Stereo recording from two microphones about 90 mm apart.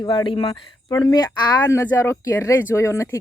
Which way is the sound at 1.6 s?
30° left (ahead or behind).